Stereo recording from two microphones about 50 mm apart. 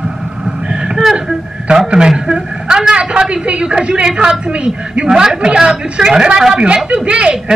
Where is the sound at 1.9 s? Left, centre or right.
Centre.